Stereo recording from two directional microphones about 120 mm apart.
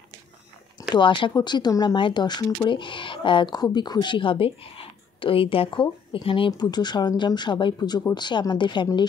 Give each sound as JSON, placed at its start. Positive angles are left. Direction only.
{"t": 0.7, "sound": "speech", "side_deg": 40}